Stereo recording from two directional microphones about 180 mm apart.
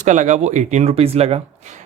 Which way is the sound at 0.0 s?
40° right (ahead or behind).